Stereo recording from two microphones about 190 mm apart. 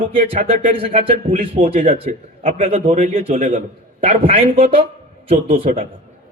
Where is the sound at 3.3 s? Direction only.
45° right (ahead or behind).